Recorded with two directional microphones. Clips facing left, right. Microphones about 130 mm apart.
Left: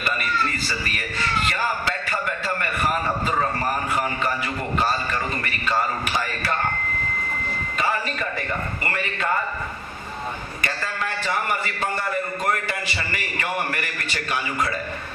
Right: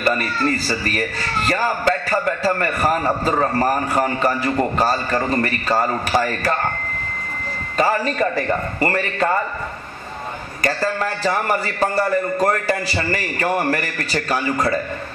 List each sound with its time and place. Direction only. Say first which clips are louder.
0.0 s a man's voice: right 6 dB; 35° right (ahead or behind)
7.7 s a man's voice: right 7 dB; 40° right (ahead or behind)
10.6 s a man's voice: right 9 dB; 40° right (ahead or behind)